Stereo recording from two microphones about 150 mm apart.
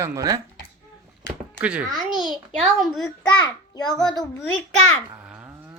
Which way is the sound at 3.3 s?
25° left (ahead or behind).